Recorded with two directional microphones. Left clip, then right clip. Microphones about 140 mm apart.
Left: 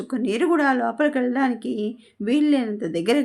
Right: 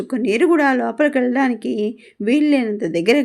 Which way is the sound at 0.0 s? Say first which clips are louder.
Right 6 dB; 25° right (ahead or behind).